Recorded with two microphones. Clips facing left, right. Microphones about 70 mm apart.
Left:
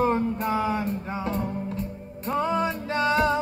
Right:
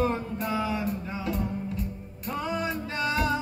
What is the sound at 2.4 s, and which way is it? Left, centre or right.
Music, left.